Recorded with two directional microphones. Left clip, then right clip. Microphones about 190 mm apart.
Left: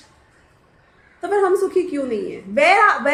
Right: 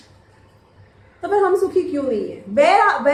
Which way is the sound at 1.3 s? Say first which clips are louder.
Right 1 dB; 45° left (ahead or behind).